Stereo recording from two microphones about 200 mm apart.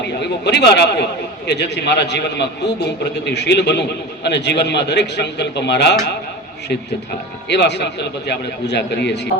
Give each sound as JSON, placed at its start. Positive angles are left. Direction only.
{"t": 0.2, "sound": "a man's voice", "side_deg": 55}
{"t": 7.4, "sound": "a man's voice", "side_deg": 60}